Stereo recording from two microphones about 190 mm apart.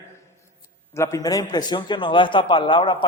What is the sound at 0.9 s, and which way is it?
Speech, 15° left (ahead or behind).